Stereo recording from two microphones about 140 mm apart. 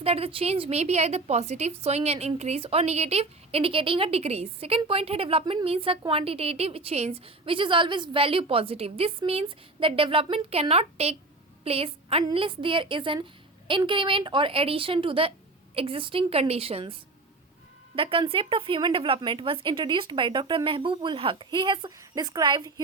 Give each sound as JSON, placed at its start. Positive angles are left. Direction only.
{"t": 0.0, "sound": "a woman's voice", "side_deg": -45}